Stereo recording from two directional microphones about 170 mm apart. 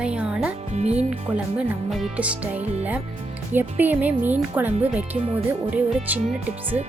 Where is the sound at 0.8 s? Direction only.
40° right (ahead or behind).